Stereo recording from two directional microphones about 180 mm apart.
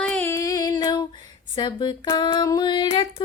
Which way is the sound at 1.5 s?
25° left (ahead or behind).